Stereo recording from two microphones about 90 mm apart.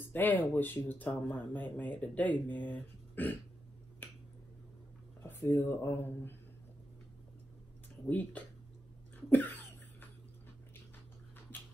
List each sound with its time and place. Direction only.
0.1 s speech: 20° left (ahead or behind)
4.0 s finger snapping: 20° left (ahead or behind)
5.2 s speech: 25° left (ahead or behind)
8.1 s speech: 15° left (ahead or behind)
9.3 s cough: 20° left (ahead or behind)